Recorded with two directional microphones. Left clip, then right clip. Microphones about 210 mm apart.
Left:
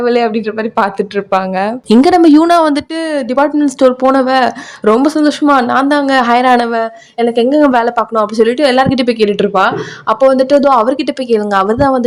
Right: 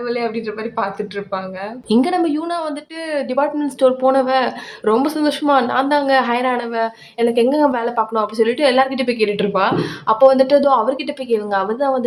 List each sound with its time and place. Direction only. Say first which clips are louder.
0.0 s speech: left 9 dB; 45° left (ahead or behind)
1.9 s speech: left 10 dB; 35° left (ahead or behind)
6.7 s a woman's voice: left 5 dB; 25° left (ahead or behind)